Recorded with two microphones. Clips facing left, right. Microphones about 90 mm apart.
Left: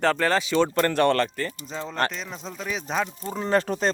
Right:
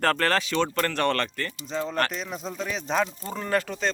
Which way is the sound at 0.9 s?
5° left (ahead or behind).